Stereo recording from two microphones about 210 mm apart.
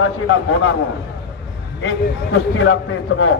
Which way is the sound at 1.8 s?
70° left (ahead or behind).